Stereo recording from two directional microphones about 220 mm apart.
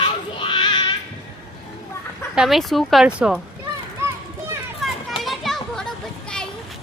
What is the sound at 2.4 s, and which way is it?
Speech, centre (ahead or behind).